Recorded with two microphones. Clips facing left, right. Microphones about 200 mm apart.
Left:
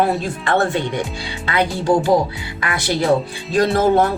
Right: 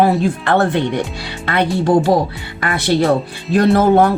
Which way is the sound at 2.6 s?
55° right (ahead or behind).